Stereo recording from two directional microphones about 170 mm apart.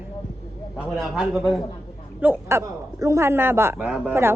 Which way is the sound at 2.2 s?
15° right (ahead or behind).